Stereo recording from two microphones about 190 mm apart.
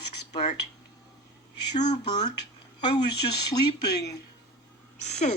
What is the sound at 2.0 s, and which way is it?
Speech, 20° left (ahead or behind).